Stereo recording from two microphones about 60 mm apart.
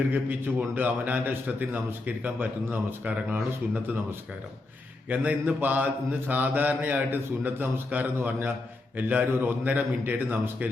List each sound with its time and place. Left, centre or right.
0.1 s mantra: right
5.0 s mantra: right